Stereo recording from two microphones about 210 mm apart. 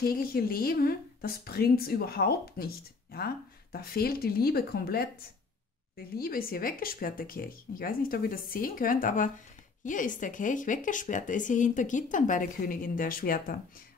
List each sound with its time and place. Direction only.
0.0 s a woman's voice: 45° left (ahead or behind)